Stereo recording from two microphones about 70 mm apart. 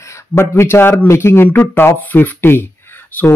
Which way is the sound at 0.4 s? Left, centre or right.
Left.